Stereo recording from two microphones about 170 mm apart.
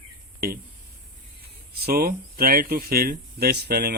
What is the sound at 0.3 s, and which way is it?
Speech, 60° right (ahead or behind).